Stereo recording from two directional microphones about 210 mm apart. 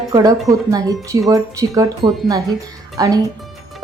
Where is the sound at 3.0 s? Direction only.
15° right (ahead or behind).